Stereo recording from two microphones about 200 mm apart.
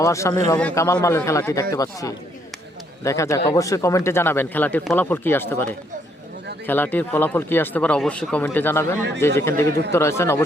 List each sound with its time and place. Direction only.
0.0 s speech: 15° left (ahead or behind)